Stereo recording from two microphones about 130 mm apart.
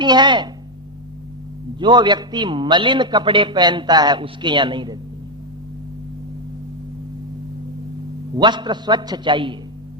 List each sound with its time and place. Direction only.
0.0 s a man's voice: 35° right (ahead or behind)
1.8 s a man's voice: 35° right (ahead or behind)
8.4 s a man's voice: 35° right (ahead or behind)